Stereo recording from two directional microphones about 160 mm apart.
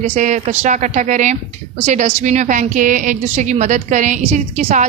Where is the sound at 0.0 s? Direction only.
50° right (ahead or behind).